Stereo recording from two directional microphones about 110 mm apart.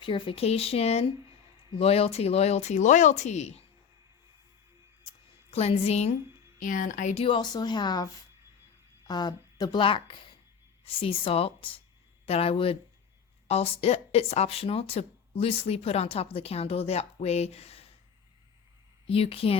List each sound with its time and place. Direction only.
0.0 s speech: 55° left (ahead or behind); by 3.6 s 90° left
5.5 s speech: 65° left (ahead or behind)
7.3 s speech: 40° left (ahead or behind)
9.8 s speech: 50° left (ahead or behind)
13.5 s speech: 70° left (ahead or behind)
19.0 s speech: 60° left (ahead or behind)